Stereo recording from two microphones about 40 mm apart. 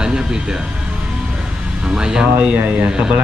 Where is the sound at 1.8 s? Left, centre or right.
Right.